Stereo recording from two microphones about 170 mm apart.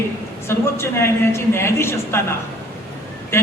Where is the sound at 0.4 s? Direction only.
15° left (ahead or behind).